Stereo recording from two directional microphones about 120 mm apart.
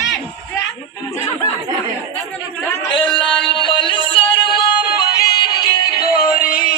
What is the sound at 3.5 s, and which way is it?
Music, 45° left (ahead or behind).